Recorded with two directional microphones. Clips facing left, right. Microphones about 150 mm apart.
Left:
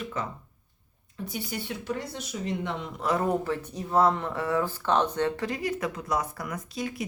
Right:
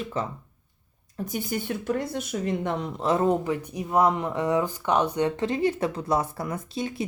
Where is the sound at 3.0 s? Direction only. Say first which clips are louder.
Right 3 dB; 25° right (ahead or behind).